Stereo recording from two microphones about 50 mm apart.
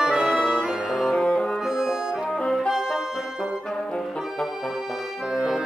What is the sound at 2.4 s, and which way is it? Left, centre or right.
Music, centre.